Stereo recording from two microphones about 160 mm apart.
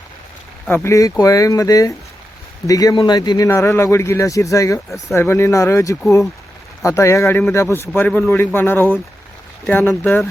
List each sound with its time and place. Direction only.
0.7 s a man's voice: 15° left (ahead or behind)
10.0 s a man's voice: 10° left (ahead or behind)